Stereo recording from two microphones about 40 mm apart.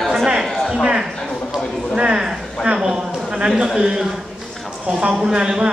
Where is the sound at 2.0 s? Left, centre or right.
Right.